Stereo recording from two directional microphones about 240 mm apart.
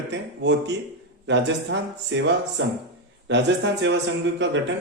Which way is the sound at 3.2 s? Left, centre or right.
Right.